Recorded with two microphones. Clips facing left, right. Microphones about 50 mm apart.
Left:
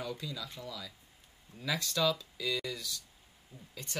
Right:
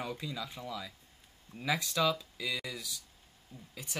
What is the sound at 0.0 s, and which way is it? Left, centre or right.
Speech, right.